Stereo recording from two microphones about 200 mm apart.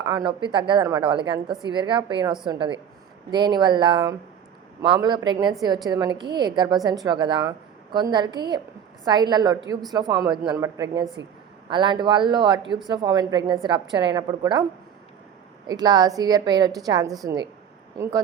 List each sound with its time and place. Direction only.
0.0 s a woman's voice: 20° right (ahead or behind)
15.6 s a woman's voice: 20° right (ahead or behind)